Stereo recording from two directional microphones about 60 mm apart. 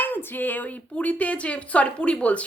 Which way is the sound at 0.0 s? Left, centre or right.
Left.